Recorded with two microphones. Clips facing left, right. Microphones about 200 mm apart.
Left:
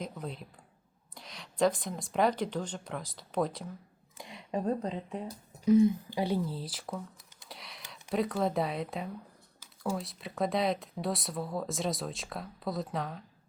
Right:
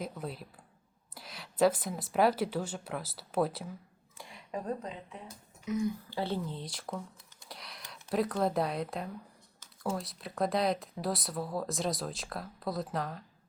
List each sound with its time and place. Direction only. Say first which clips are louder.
0.0 s speech: even; 5° right (ahead or behind)
4.2 s a woman's voice: left 5 dB; 20° left (ahead or behind)
5.9 s speech: left 3 dB; 15° left (ahead or behind)
7.4 s computer keyboard: even; centre (ahead or behind)
8.1 s speech: even; centre (ahead or behind)